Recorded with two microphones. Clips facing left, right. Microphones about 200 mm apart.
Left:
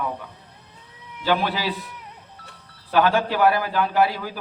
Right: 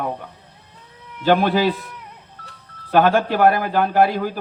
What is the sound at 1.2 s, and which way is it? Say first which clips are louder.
Speech: right 7 dB; 50° right (ahead or behind).